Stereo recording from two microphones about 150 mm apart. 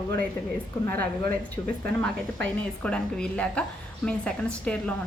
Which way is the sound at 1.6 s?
25° left (ahead or behind).